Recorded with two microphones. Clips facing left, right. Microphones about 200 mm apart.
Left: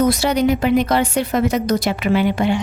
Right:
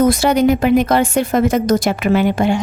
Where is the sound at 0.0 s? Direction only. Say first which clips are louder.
Right 3 dB; 50° right (ahead or behind).